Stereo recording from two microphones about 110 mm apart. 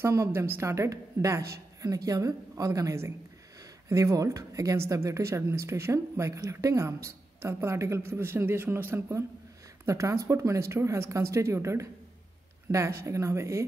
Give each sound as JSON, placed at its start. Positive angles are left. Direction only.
{"t": 0.0, "sound": "a woman's voice", "side_deg": -25}